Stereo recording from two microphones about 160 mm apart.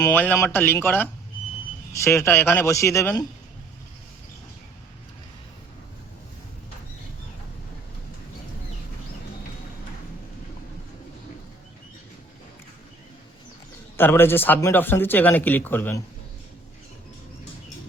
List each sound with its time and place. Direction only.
0.0 s a man's voice: 10° left (ahead or behind)
13.9 s a man's voice: 15° left (ahead or behind)